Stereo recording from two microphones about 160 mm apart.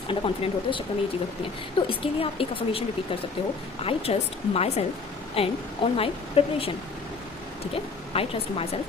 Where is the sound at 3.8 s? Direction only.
40° left (ahead or behind).